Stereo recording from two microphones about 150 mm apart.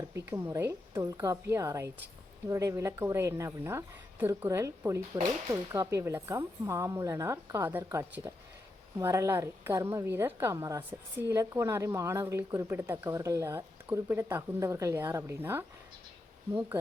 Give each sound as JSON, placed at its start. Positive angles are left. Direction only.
{"t": 0.3, "sound": "a woman's voice", "side_deg": -15}